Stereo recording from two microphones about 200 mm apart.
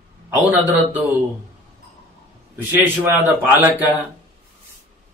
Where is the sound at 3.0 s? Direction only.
10° right (ahead or behind).